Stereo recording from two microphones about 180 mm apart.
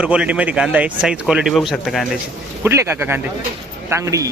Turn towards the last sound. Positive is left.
turn(degrees=-20)  # may be behind; listen again after turning